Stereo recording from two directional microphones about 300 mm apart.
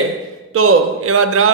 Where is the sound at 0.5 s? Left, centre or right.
Right.